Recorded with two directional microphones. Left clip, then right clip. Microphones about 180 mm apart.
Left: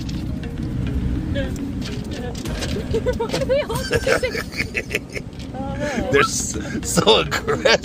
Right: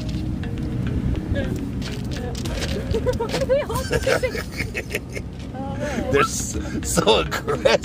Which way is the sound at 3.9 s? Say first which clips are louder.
Left 2 dB; 30° left (ahead or behind).